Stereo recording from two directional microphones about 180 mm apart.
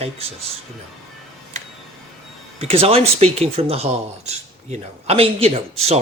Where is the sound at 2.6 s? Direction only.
30° right (ahead or behind).